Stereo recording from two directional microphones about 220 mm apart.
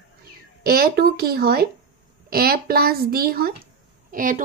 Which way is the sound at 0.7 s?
45° right (ahead or behind).